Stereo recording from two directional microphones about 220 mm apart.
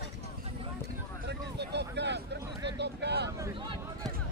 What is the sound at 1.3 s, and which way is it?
Vehicle, 50° right (ahead or behind).